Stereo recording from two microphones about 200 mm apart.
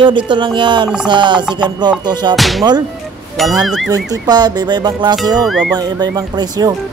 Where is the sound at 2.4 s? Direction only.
Centre (ahead or behind).